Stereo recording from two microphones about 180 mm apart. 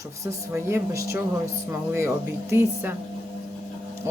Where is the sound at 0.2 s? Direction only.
15° right (ahead or behind).